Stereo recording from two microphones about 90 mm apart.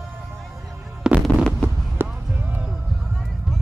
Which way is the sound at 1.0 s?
10° right (ahead or behind).